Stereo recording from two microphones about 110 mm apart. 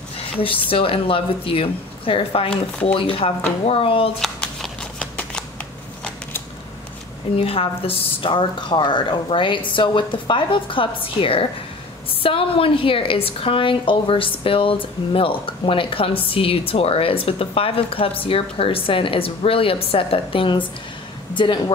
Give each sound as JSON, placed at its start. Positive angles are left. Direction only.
{"t": 0.7, "sound": "speech", "side_deg": 55}
{"t": 2.5, "sound": "speech", "side_deg": 10}
{"t": 3.0, "sound": "speech", "side_deg": 55}
{"t": 7.3, "sound": "a woman's voice", "side_deg": 55}